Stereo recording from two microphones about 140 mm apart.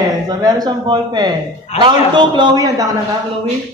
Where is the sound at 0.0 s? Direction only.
30° right (ahead or behind).